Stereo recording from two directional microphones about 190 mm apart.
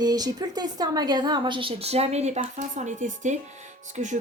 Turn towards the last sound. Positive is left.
turn(degrees=-40)  # may be behind; listen again after turning